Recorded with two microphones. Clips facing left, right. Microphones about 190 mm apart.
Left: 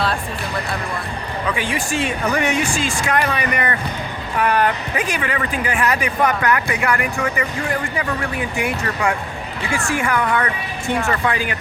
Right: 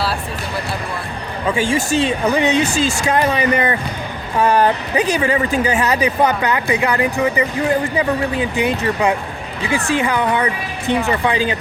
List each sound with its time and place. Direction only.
1.5 s speech: 25° right (ahead or behind)